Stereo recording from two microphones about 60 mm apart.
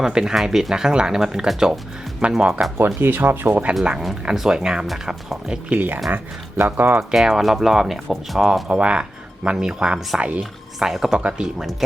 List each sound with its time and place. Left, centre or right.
0.0 s speech: centre
2.7 s speech: right
4.0 s speech: centre
5.7 s speech: right
7.1 s speech: centre
8.6 s a woman's voice: centre
10.8 s speech: centre
11.8 s speech: centre